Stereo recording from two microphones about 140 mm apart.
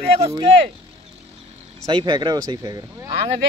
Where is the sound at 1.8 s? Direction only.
35° right (ahead or behind).